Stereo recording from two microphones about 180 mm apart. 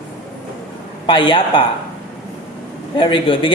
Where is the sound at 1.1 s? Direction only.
30° left (ahead or behind).